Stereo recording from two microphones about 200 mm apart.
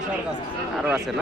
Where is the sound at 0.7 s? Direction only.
5° right (ahead or behind).